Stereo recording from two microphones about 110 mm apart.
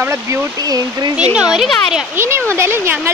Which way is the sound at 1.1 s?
10° right (ahead or behind).